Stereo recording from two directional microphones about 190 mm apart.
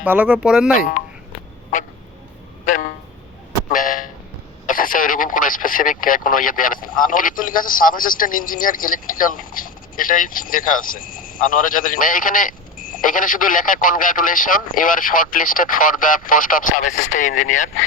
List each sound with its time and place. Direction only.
0.0 s speech: 10° right (ahead or behind)
3.7 s a sound: 45° left (ahead or behind)
4.6 s radio: 45° left (ahead or behind)
6.8 s a man's voice: 45° left (ahead or behind)